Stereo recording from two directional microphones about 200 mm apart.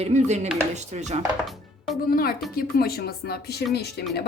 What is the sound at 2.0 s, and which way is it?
Speech, 45° left (ahead or behind).